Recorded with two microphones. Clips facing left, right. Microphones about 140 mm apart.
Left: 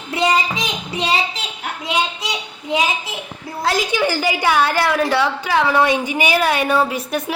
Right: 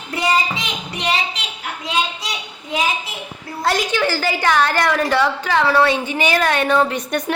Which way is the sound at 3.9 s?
15° left (ahead or behind).